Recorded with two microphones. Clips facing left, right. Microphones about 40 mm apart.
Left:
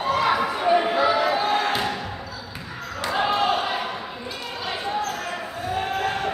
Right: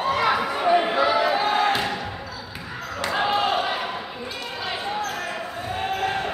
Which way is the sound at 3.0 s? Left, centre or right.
Centre.